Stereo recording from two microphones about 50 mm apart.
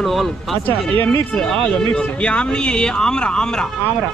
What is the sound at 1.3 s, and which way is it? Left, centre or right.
Speech, centre.